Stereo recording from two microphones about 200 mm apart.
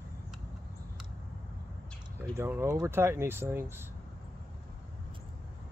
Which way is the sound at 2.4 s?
15° right (ahead or behind).